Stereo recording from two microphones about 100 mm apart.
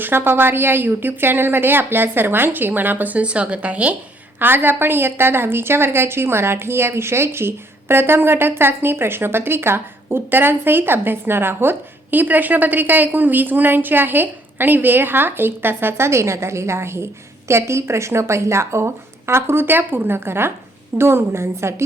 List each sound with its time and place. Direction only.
0.0 s a woman's voice: 20° right (ahead or behind)